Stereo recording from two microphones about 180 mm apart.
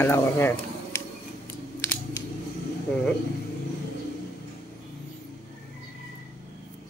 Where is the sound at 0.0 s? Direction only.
10° left (ahead or behind).